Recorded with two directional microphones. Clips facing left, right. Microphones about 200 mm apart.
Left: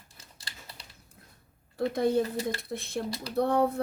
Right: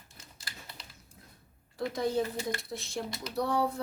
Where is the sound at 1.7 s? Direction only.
55° left (ahead or behind).